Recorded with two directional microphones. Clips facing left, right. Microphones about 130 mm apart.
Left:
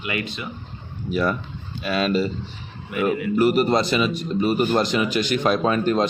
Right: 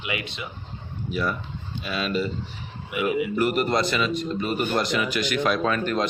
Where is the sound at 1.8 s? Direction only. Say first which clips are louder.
Left 6 dB; 55° left (ahead or behind).